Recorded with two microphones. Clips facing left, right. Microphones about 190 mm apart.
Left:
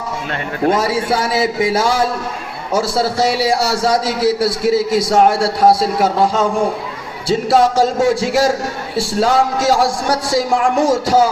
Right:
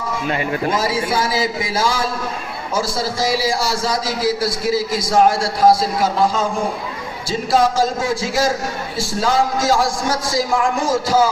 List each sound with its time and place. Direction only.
0.9 s music: 65° left (ahead or behind)
2.7 s a man's voice: 65° left (ahead or behind)